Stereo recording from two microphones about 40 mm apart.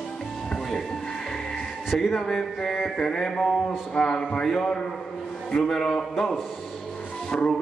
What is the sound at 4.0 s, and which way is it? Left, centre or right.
Speech, centre.